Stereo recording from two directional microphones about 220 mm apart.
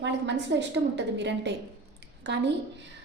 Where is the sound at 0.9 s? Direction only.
55° right (ahead or behind).